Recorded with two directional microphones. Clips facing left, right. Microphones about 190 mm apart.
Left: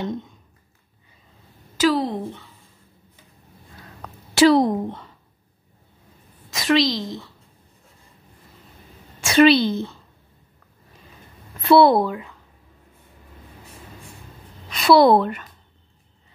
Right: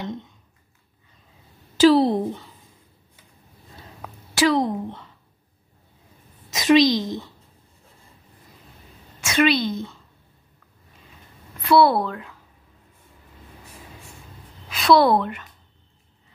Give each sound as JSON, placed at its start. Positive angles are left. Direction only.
{"t": 1.8, "sound": "a woman's voice", "side_deg": -30}
{"t": 4.0, "sound": "a sound", "side_deg": -5}
{"t": 4.4, "sound": "a woman's voice", "side_deg": 35}
{"t": 6.5, "sound": "a woman's voice", "side_deg": -20}
{"t": 9.2, "sound": "a woman's voice", "side_deg": 30}
{"t": 11.6, "sound": "a woman's voice", "side_deg": 25}
{"t": 12.0, "sound": "speech", "side_deg": 5}
{"t": 14.7, "sound": "a sound", "side_deg": 0}
{"t": 15.1, "sound": "a woman's voice", "side_deg": 40}